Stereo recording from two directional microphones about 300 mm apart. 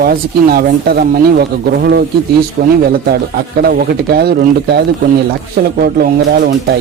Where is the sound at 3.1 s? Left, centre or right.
Right.